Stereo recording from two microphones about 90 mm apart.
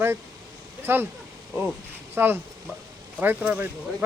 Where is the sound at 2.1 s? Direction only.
25° right (ahead or behind).